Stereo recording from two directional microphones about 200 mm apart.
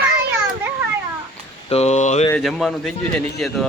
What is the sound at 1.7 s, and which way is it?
Speech, 35° left (ahead or behind).